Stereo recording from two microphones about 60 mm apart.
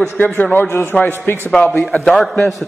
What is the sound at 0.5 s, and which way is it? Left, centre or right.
Speech, left.